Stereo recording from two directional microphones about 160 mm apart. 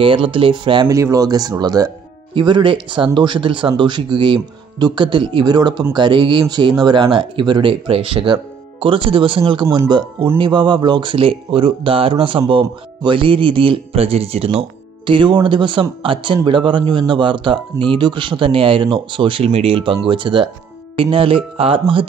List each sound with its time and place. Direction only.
0.0 s speech: 35° right (ahead or behind)
0.8 s speech: 20° right (ahead or behind)